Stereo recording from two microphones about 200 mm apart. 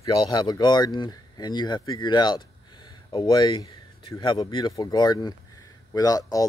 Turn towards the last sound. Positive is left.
turn(degrees=20)  # may be behind; listen again after turning